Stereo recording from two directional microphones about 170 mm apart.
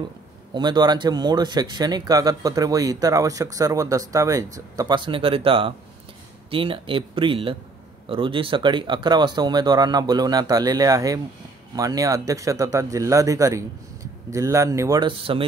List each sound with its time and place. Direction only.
0.6 s speech: 25° right (ahead or behind)